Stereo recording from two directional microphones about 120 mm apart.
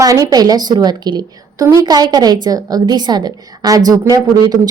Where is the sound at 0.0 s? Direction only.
30° right (ahead or behind).